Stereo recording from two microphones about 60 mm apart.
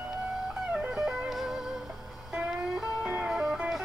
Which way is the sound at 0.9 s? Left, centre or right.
Centre.